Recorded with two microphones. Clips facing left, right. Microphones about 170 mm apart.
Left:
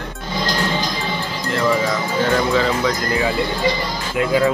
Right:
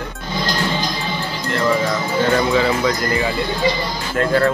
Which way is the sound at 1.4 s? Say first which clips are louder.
Even; centre (ahead or behind).